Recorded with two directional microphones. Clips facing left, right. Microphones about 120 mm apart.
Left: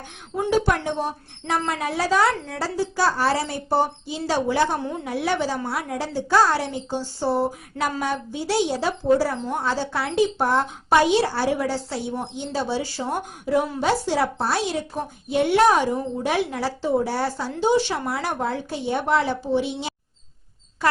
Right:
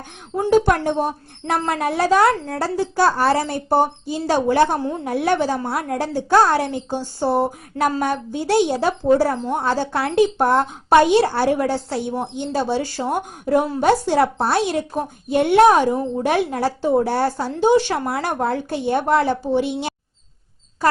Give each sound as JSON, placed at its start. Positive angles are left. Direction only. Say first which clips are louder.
{"t": 0.5, "sound": "a woman's voice", "louder": "right 6 dB", "side_deg": -50}